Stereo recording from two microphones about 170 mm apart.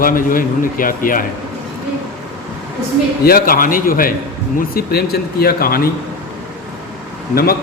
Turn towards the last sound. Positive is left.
turn(degrees=60)  # may be behind; listen again after turning